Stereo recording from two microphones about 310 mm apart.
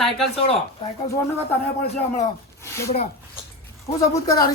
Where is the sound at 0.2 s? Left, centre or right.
Centre.